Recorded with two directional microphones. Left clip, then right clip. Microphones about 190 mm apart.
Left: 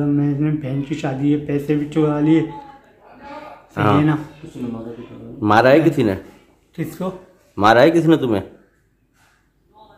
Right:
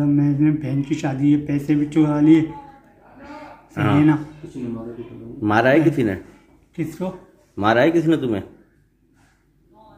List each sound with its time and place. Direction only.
0.0 s speech: centre (ahead or behind)
3.9 s speech: centre (ahead or behind)
5.4 s a man's voice: 20° left (ahead or behind)
6.7 s speech: 10° left (ahead or behind)
7.5 s a man's voice: 20° left (ahead or behind)